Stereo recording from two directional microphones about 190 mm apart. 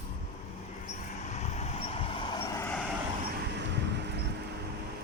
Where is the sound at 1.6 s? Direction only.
30° left (ahead or behind).